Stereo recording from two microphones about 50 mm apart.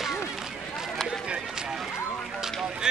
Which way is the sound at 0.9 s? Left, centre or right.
Centre.